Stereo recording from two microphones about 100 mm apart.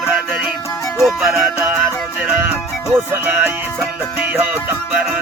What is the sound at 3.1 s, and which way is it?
Music, 20° right (ahead or behind).